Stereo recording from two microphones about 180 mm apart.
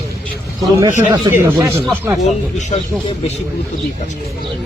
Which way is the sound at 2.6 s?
40° left (ahead or behind).